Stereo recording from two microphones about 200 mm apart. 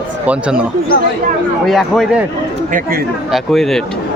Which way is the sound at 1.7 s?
Centre (ahead or behind).